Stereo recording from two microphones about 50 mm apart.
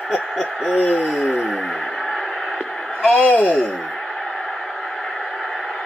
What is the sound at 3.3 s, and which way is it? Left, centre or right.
Speech, left.